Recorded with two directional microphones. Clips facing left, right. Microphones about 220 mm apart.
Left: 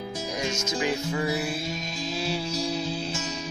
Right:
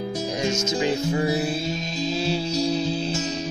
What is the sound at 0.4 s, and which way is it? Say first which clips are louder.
Music: right 4 dB; 25° right (ahead or behind).